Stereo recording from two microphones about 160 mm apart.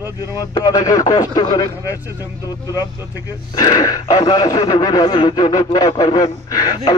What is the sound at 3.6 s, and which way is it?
A man's voice, 25° left (ahead or behind).